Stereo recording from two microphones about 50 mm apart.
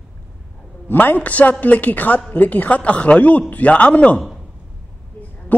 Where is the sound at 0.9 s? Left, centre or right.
Left.